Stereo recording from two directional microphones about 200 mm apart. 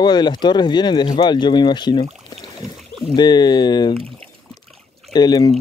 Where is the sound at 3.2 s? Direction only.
20° left (ahead or behind).